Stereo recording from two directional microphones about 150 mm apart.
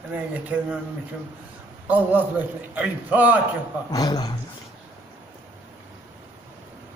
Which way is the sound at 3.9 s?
25° left (ahead or behind).